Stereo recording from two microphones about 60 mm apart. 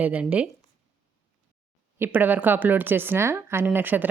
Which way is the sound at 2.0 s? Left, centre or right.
Right.